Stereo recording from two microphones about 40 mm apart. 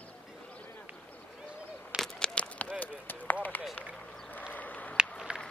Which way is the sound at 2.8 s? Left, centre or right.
Left.